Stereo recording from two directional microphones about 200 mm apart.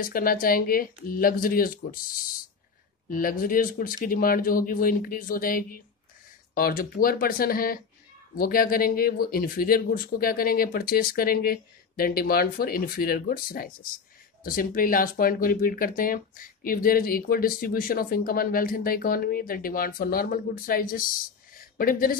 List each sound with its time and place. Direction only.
0.0 s speech: 45° left (ahead or behind)
3.1 s speech: 45° left (ahead or behind)
21.5 s a sound: 45° left (ahead or behind)